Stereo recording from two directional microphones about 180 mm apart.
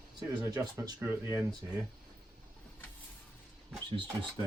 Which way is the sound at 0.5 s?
20° right (ahead or behind).